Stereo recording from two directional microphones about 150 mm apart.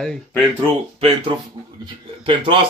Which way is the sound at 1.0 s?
40° right (ahead or behind).